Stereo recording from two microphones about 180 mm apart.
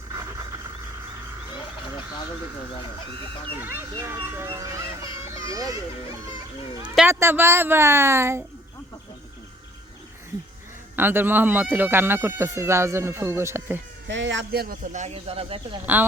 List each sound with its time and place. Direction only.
0.1 s a sound: 15° right (ahead or behind)
3.6 s speech: 10° right (ahead or behind)
7.1 s speech: 15° right (ahead or behind)
10.9 s speech: 10° right (ahead or behind)
14.1 s speech: 90° right; by 14.8 s 60° right (ahead or behind)
14.9 s speech: 35° right (ahead or behind)